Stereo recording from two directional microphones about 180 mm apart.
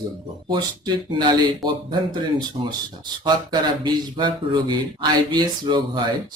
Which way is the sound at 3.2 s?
25° right (ahead or behind).